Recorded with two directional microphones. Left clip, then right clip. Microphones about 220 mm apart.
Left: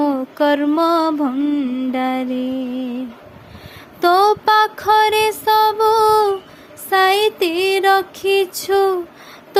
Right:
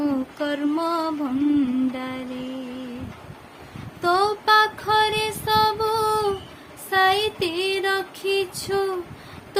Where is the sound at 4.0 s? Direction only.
35° left (ahead or behind).